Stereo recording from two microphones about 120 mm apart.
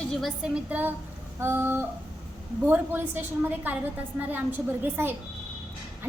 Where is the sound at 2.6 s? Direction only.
15° right (ahead or behind).